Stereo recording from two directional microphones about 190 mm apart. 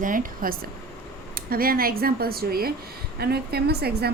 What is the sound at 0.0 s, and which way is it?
A woman's voice, 45° right (ahead or behind).